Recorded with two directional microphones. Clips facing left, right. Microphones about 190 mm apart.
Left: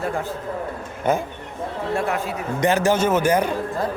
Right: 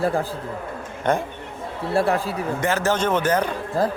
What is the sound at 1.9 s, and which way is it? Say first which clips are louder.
Speech: right 4 dB; 35° right (ahead or behind).